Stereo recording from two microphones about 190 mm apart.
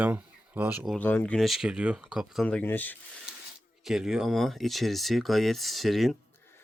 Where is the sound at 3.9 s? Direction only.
Centre (ahead or behind).